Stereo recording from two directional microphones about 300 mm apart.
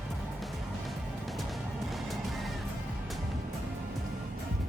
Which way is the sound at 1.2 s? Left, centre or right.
Centre.